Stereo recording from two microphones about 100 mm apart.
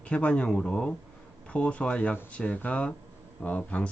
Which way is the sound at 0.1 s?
15° left (ahead or behind).